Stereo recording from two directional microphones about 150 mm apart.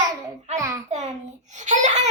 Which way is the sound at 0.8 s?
50° right (ahead or behind).